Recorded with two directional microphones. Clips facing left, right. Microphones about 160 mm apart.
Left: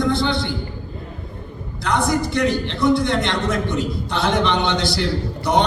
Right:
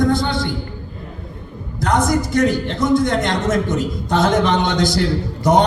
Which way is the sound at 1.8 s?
45° right (ahead or behind).